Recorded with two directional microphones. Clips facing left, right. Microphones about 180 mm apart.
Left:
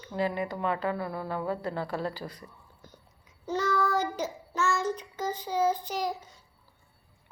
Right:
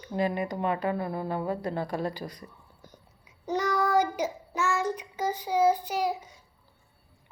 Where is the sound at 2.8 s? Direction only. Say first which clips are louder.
Right 2 dB; 10° right (ahead or behind).